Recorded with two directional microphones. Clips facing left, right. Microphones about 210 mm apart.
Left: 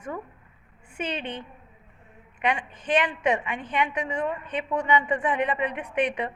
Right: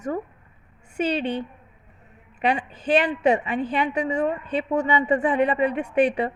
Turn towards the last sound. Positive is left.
turn(degrees=-35)  # may be behind; listen again after turning